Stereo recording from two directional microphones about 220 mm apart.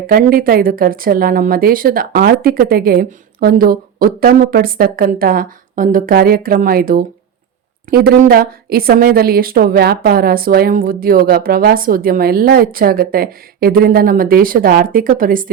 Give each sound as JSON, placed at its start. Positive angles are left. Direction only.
{"t": 0.1, "sound": "a woman's voice", "side_deg": -40}